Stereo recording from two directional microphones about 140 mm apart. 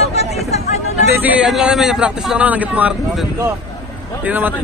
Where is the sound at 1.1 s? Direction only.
10° right (ahead or behind).